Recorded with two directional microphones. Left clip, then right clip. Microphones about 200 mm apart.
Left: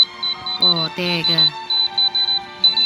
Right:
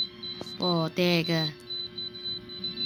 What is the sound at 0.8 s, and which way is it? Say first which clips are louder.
Speech: left 7 dB; 5° right (ahead or behind).